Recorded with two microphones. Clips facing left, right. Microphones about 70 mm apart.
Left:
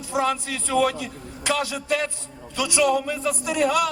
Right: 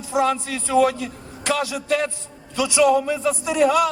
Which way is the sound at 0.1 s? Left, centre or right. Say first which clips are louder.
Right 3 dB; centre.